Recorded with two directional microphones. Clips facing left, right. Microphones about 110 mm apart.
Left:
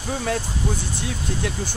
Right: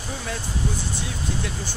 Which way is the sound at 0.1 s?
55° left (ahead or behind).